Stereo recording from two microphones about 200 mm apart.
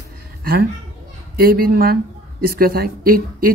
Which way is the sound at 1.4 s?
45° right (ahead or behind).